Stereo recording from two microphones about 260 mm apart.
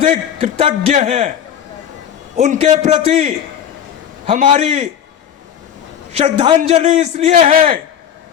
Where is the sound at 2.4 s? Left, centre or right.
Right.